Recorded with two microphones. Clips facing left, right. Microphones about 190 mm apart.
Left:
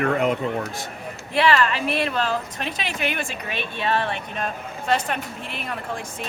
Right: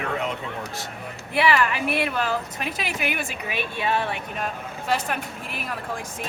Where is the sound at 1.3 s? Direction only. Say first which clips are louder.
Left 2 dB; 10° right (ahead or behind).